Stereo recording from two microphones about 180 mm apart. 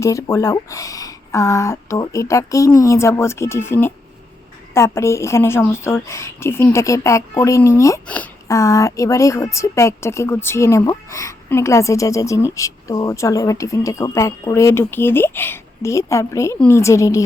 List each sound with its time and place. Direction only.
0.0 s a woman's voice: 15° left (ahead or behind)